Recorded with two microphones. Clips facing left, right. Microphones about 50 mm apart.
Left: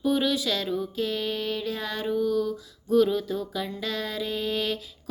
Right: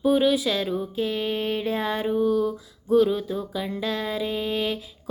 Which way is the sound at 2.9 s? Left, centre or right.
Centre.